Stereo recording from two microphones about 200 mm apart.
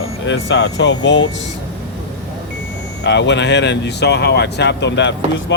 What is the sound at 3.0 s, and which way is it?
Speech, 60° left (ahead or behind).